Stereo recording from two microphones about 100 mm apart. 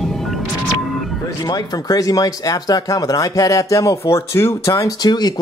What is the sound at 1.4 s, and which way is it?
Speech, 40° left (ahead or behind).